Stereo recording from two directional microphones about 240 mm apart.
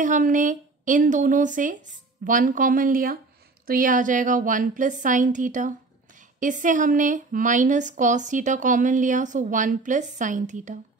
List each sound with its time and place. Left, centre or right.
0.0 s speech: right